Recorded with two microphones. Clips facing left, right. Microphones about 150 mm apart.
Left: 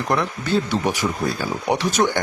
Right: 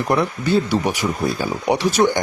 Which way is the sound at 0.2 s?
15° right (ahead or behind).